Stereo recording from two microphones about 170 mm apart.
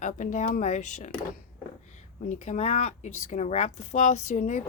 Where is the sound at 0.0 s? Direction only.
45° left (ahead or behind).